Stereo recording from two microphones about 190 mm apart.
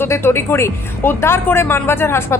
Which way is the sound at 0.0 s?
10° left (ahead or behind).